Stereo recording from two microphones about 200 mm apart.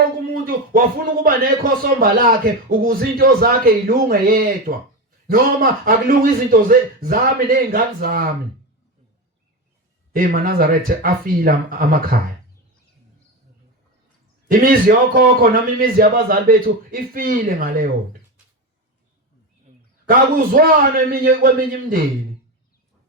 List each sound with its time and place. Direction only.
0.4 s speech: 45° right (ahead or behind)
10.2 s speech: 45° right (ahead or behind)
14.5 s speech: 45° right (ahead or behind)
20.1 s speech: 45° right (ahead or behind)